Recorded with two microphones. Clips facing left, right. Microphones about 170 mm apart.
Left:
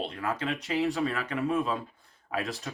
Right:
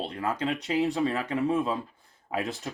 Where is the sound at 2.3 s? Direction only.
20° right (ahead or behind).